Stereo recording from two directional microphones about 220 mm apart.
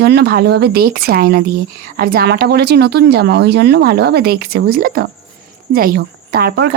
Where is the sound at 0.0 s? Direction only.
50° right (ahead or behind).